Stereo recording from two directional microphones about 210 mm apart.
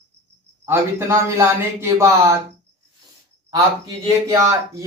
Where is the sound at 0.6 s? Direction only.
10° right (ahead or behind).